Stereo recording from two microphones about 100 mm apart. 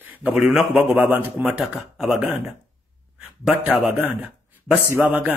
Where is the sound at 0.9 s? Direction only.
15° right (ahead or behind).